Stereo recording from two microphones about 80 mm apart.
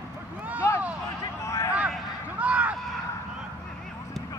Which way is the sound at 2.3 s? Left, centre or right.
Centre.